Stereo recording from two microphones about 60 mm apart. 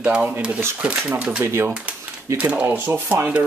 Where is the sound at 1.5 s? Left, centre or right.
Right.